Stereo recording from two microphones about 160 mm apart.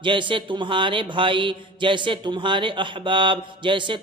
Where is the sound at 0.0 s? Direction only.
30° right (ahead or behind).